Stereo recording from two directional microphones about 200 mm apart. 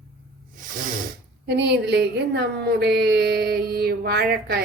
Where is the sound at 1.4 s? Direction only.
55° right (ahead or behind).